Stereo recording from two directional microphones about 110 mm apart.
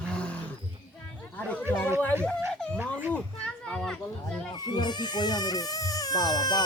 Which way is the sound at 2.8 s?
15° right (ahead or behind).